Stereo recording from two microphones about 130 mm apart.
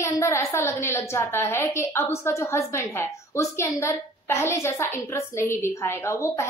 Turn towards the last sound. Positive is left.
turn(degrees=20)  # may be behind; listen again after turning